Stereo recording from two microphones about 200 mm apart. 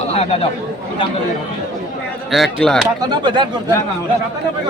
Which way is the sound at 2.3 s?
Centre (ahead or behind).